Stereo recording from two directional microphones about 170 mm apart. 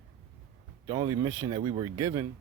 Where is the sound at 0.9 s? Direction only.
25° right (ahead or behind).